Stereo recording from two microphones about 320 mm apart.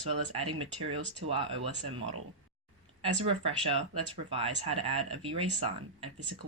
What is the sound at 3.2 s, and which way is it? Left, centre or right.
Speech, centre.